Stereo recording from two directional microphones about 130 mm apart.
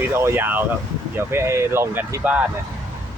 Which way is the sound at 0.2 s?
15° right (ahead or behind).